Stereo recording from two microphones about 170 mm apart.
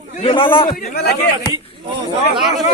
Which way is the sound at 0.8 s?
60° left (ahead or behind).